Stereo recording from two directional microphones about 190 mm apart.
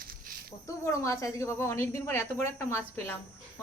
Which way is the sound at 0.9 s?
15° left (ahead or behind).